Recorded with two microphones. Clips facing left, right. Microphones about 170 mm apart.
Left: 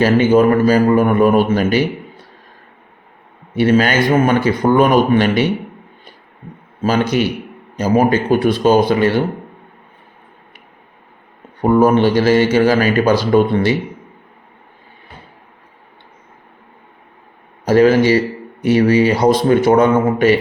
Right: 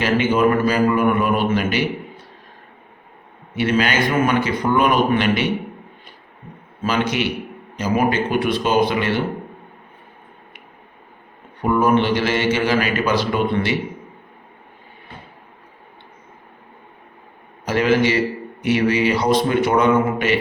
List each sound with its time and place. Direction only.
0.0 s speech: 40° left (ahead or behind)
3.5 s speech: 40° left (ahead or behind)
6.8 s speech: 40° left (ahead or behind)
11.6 s speech: 35° left (ahead or behind)
17.7 s speech: 40° left (ahead or behind)